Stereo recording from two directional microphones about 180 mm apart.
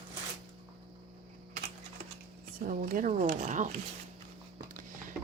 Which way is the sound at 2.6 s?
50° right (ahead or behind).